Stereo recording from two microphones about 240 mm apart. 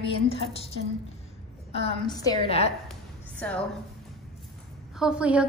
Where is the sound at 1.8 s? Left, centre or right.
Centre.